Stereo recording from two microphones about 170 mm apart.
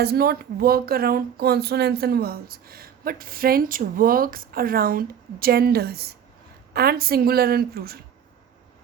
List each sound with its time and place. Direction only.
0.0 s speech: 70° right (ahead or behind)